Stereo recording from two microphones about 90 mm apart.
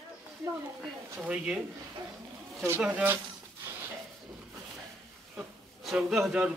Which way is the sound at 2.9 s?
20° right (ahead or behind).